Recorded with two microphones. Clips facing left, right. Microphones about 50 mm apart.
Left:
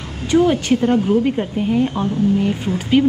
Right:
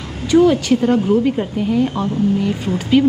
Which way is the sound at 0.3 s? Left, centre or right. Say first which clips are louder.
Right 2 dB; left.